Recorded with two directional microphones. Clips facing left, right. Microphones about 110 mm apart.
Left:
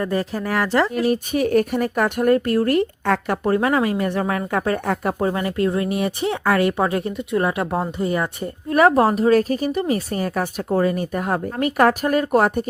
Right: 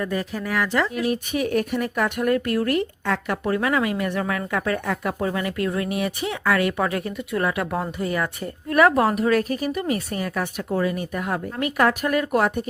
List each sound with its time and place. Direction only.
0.0 s speech: 35° left (ahead or behind)